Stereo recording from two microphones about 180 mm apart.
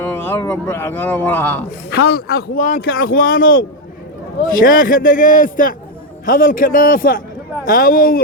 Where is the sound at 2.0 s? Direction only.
60° left (ahead or behind).